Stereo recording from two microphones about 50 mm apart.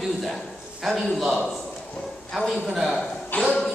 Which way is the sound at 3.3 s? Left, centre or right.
Left.